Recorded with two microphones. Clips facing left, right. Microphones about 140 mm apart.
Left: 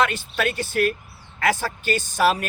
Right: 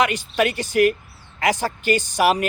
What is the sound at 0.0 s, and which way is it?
A man's voice, 15° right (ahead or behind).